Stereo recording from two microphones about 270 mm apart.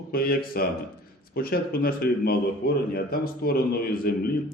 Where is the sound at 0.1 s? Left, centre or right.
Left.